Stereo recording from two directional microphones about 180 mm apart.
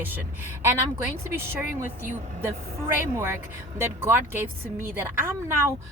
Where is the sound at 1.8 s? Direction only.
10° right (ahead or behind).